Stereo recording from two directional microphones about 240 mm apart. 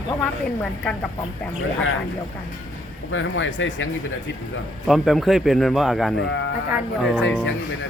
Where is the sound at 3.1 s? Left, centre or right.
Left.